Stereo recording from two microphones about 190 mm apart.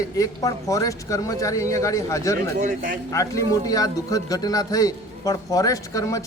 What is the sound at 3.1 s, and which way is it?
Speech, 15° left (ahead or behind).